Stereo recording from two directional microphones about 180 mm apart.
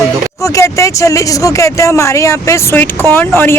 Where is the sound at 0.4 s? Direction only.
15° left (ahead or behind).